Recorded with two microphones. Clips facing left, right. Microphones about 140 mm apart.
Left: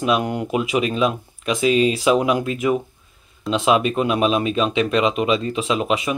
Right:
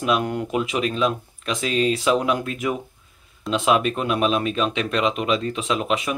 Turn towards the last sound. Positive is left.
turn(degrees=5)  # may be behind; listen again after turning